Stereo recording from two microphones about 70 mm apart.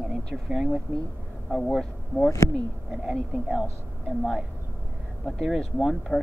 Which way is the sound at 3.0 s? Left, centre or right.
Centre.